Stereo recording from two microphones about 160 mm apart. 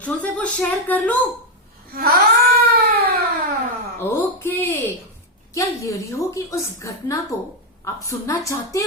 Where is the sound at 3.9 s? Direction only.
15° left (ahead or behind).